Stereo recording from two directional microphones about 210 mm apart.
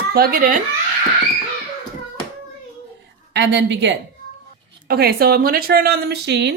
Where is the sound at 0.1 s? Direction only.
45° right (ahead or behind).